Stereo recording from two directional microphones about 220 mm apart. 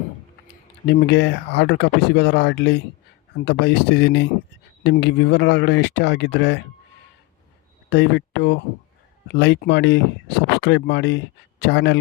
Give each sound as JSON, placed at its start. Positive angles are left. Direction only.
{"t": 0.9, "sound": "speech", "side_deg": 50}
{"t": 7.9, "sound": "speech", "side_deg": 50}